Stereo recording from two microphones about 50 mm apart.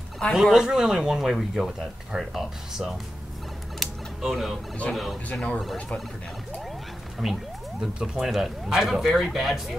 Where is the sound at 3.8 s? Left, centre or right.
Centre.